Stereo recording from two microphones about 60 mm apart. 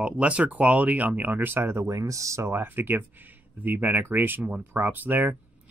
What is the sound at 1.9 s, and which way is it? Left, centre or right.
Speech, right.